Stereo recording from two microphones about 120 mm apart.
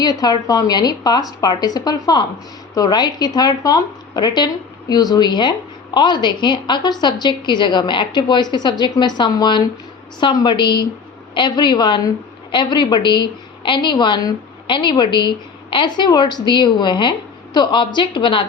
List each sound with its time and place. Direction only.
0.0 s a woman's voice: 35° left (ahead or behind)